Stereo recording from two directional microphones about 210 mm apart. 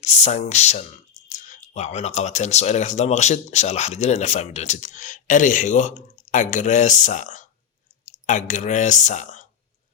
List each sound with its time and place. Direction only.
0.0 s speech: 35° left (ahead or behind)